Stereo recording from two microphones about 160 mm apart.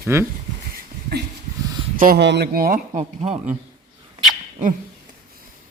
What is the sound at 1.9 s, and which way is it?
Speech, 65° right (ahead or behind).